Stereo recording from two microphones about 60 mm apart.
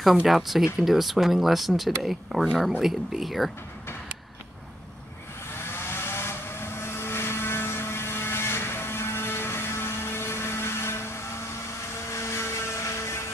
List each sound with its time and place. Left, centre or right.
0.0 s speech: centre
5.6 s vehicle: left